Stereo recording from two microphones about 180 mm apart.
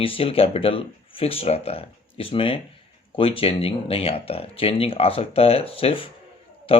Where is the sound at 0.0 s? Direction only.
30° left (ahead or behind).